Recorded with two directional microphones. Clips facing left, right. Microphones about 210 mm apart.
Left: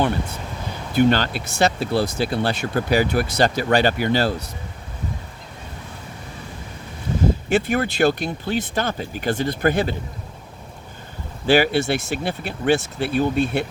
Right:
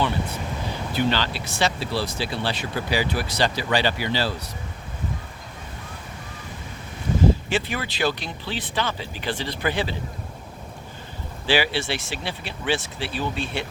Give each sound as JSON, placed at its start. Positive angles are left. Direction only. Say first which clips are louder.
{"t": 0.9, "sound": "speech", "louder": "left 7 dB", "side_deg": 50}
{"t": 7.7, "sound": "speech", "louder": "left 7 dB", "side_deg": 50}
{"t": 11.4, "sound": "speech", "louder": "left 6 dB", "side_deg": 45}